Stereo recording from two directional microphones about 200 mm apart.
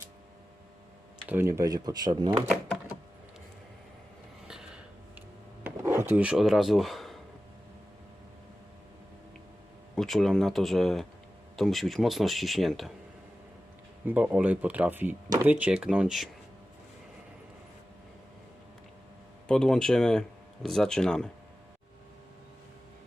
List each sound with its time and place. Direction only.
1.3 s speech: 10° right (ahead or behind)
4.4 s a sound: 5° right (ahead or behind)
9.9 s speech: centre (ahead or behind)
14.1 s speech: 5° right (ahead or behind)
19.5 s speech: 5° left (ahead or behind)